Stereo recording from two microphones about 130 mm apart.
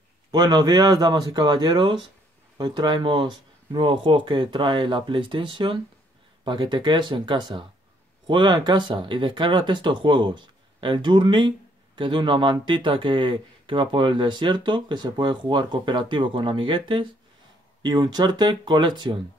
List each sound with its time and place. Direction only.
0.3 s speech: 35° right (ahead or behind)